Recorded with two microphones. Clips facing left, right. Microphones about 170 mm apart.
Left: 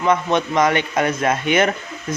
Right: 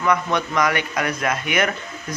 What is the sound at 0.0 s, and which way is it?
Speech, 25° left (ahead or behind).